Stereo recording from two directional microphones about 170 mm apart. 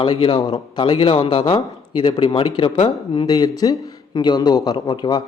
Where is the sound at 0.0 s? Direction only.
30° left (ahead or behind).